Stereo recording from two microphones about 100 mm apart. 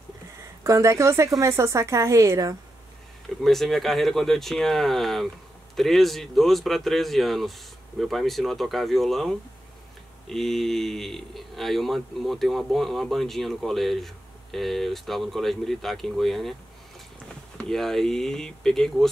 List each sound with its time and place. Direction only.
0.7 s speech: 30° right (ahead or behind)
3.4 s speech: centre (ahead or behind)
17.6 s speech: 5° left (ahead or behind)